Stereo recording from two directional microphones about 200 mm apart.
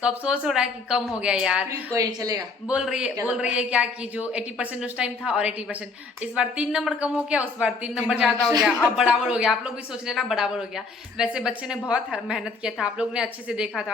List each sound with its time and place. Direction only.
0.0 s speech: 5° right (ahead or behind)
1.9 s a woman's voice: 20° right (ahead or behind)
2.6 s speech: 5° right (ahead or behind)